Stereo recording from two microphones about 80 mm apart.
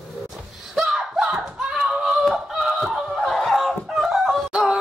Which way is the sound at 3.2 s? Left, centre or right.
Centre.